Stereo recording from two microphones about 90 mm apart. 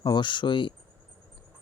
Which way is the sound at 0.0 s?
60° left (ahead or behind).